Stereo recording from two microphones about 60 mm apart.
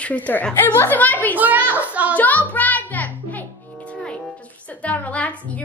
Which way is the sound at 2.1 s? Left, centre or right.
Left.